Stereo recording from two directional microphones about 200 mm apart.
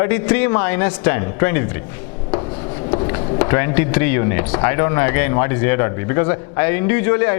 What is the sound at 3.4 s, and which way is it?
Speech, 15° left (ahead or behind).